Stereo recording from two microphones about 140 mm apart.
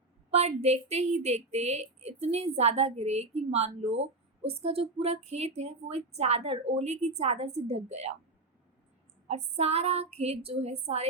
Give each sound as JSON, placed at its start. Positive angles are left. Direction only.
{"t": 0.3, "sound": "a woman's voice", "side_deg": -50}
{"t": 9.2, "sound": "a woman's voice", "side_deg": -50}